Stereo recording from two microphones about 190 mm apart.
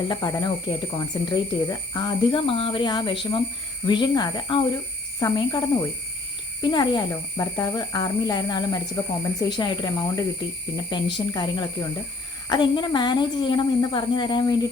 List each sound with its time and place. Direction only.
0.1 s speech: 20° left (ahead or behind)